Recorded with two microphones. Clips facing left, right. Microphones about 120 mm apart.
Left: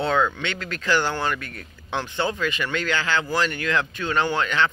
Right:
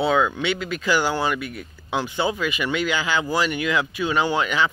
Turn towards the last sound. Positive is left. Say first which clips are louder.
# right 1 dB
turn(degrees=-10)  # may be behind; listen again after turning